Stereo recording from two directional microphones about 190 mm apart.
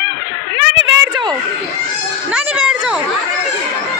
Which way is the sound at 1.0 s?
20° right (ahead or behind).